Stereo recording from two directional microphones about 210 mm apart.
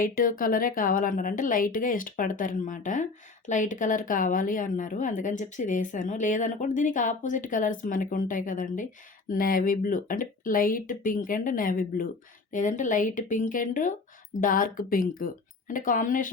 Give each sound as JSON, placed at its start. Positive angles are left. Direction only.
{"t": 0.0, "sound": "a woman's voice", "side_deg": 40}